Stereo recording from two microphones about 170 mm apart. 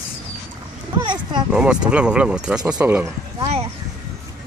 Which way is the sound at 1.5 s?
5° right (ahead or behind).